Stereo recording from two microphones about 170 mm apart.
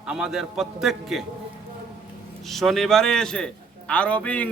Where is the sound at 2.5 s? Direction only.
Centre (ahead or behind).